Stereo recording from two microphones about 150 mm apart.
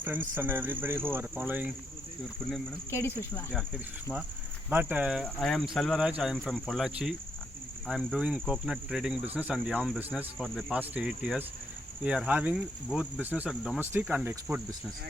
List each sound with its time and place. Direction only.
0.0 s speech: 10° right (ahead or behind)
2.9 s speech: 20° left (ahead or behind)
4.7 s speech: 10° right (ahead or behind)